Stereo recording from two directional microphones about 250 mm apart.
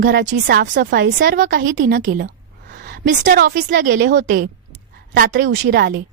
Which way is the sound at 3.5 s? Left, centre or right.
Right.